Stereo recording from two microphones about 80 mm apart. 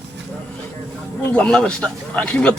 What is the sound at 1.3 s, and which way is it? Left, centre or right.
A man's voice, centre.